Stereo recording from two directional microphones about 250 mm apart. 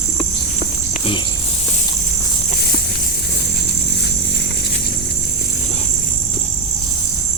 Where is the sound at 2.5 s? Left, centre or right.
Left.